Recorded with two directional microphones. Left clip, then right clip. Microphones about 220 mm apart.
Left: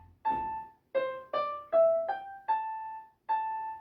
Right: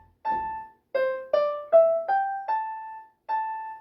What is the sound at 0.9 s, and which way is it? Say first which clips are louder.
Music: right 7 dB; 45° right (ahead or behind).